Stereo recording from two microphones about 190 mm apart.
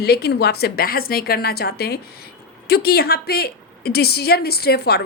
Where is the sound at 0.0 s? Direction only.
55° left (ahead or behind).